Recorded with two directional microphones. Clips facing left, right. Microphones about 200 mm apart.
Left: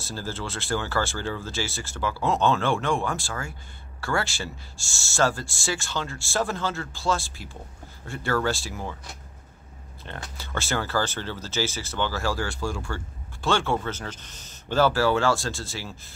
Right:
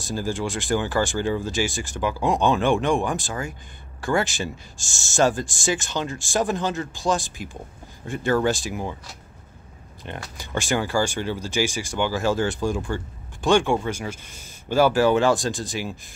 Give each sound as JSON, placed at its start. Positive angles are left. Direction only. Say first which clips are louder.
{"t": 0.0, "sound": "speech", "louder": "right 7 dB", "side_deg": -15}
{"t": 10.0, "sound": "speech", "louder": "right 3 dB", "side_deg": -15}